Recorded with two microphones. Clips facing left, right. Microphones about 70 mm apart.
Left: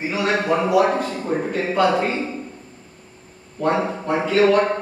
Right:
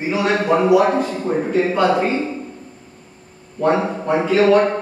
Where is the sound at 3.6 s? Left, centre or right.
Centre.